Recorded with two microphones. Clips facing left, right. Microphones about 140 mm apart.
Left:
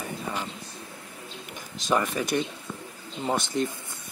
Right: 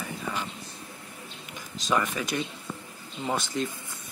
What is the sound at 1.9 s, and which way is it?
Speech, 25° left (ahead or behind).